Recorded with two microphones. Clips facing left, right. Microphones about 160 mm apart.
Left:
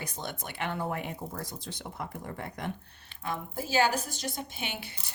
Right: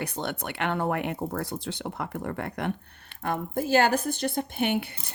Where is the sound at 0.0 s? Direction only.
65° right (ahead or behind).